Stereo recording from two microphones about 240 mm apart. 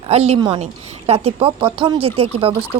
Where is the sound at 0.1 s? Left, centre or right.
Right.